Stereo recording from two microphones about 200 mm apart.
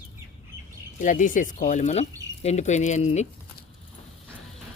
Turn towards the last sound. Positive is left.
turn(degrees=35)  # may be behind; listen again after turning